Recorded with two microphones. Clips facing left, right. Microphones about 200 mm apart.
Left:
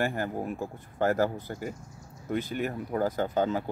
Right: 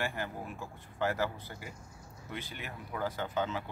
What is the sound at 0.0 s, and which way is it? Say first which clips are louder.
Speech: left 7 dB; 45° left (ahead or behind).